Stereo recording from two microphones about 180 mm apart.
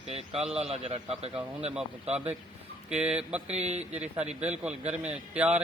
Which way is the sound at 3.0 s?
5° right (ahead or behind).